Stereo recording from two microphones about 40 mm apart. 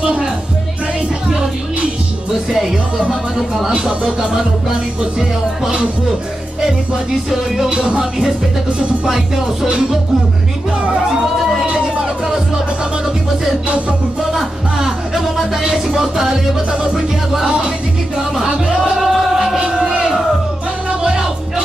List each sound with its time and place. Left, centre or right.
0.0 s music: right
3.1 s speech: centre
7.2 s speech: centre
7.7 s music: centre
9.0 s speech: centre
14.3 s music: centre
15.9 s speech: centre
18.9 s music: centre
19.7 s crowd: centre
20.0 s music: centre